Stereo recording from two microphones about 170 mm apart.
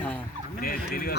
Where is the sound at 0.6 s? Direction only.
60° left (ahead or behind).